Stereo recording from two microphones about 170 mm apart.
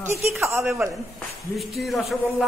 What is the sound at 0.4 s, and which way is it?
Speech, 15° right (ahead or behind).